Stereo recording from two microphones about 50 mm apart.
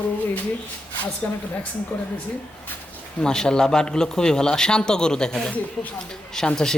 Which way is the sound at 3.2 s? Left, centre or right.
Centre.